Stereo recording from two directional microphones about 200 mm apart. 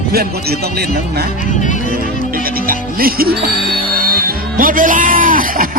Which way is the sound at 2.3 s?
45° right (ahead or behind).